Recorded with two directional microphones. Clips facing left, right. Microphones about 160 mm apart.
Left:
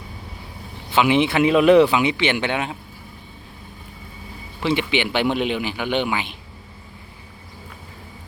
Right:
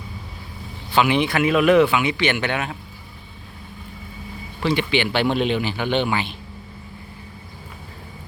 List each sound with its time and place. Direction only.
0.9 s speech: 20° left (ahead or behind)
4.6 s a man's voice: 20° left (ahead or behind)